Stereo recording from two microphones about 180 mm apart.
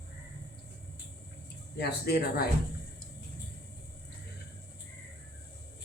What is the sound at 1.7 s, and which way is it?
Speech, 60° left (ahead or behind).